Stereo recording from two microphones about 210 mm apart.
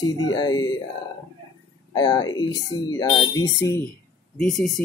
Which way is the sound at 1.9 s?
20° left (ahead or behind).